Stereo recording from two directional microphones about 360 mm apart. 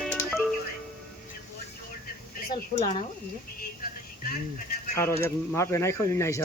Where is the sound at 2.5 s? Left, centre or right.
Centre.